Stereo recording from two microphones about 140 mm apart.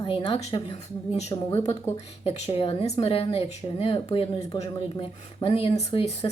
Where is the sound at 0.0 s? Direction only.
45° left (ahead or behind).